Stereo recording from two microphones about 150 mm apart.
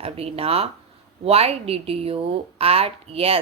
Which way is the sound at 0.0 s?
40° right (ahead or behind).